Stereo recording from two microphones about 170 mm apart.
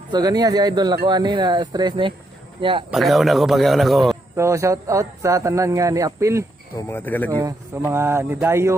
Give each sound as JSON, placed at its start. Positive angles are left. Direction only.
{"t": 0.1, "sound": "speech", "side_deg": -20}
{"t": 2.9, "sound": "a man's voice", "side_deg": 0}
{"t": 4.4, "sound": "speech", "side_deg": -15}
{"t": 6.7, "sound": "speech", "side_deg": 15}
{"t": 7.3, "sound": "speech", "side_deg": -20}